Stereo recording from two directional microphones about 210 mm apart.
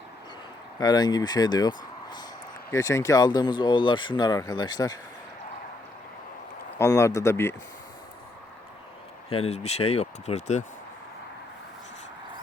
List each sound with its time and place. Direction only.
0.8 s speech: 20° left (ahead or behind)
6.7 s speech: 15° left (ahead or behind)
9.3 s speech: 30° left (ahead or behind)